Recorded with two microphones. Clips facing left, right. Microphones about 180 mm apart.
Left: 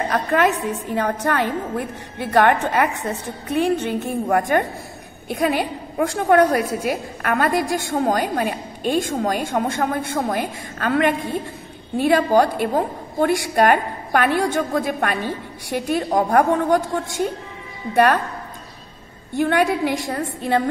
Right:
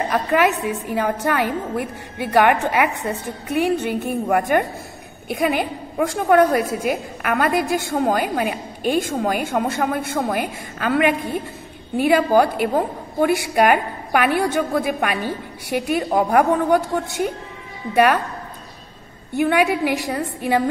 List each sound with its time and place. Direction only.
0.1 s a woman's voice: 10° right (ahead or behind)
19.3 s a woman's voice: 5° right (ahead or behind)